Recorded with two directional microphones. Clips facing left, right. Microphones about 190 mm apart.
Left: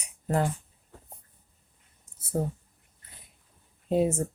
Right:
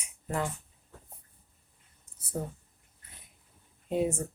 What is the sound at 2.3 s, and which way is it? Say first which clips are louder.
Speech: left 6 dB; 45° left (ahead or behind).